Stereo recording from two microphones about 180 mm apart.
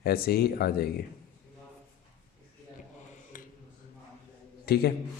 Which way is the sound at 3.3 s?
50° left (ahead or behind).